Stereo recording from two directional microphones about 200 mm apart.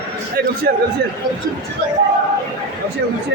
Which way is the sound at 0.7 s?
50° right (ahead or behind).